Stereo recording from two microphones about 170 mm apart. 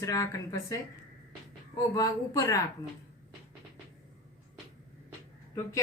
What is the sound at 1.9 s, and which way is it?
Speech, 20° left (ahead or behind).